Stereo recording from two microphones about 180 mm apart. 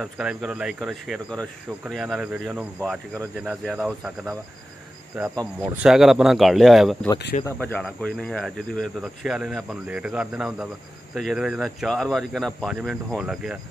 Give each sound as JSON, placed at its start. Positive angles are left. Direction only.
{"t": 0.0, "sound": "speech", "side_deg": -5}
{"t": 5.3, "sound": "speech", "side_deg": -20}
{"t": 5.8, "sound": "speech", "side_deg": 0}